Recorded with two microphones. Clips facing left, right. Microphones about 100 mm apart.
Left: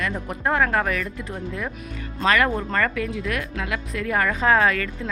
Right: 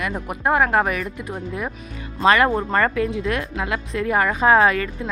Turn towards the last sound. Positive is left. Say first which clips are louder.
# right 3 dB
turn(degrees=-25)  # may be behind; listen again after turning